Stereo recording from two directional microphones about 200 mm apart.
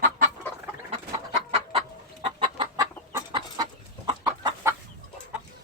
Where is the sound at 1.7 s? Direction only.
30° right (ahead or behind).